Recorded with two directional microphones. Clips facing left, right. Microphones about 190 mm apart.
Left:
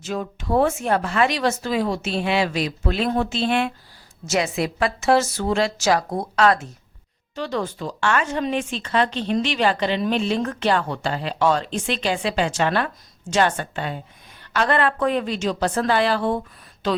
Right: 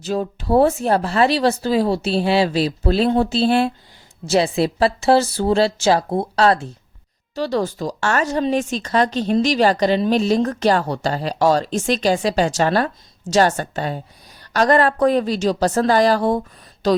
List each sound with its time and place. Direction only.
0.0 s speech: 35° right (ahead or behind)